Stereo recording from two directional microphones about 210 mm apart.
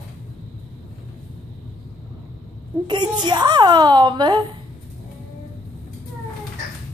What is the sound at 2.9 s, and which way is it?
A woman's voice, 20° right (ahead or behind).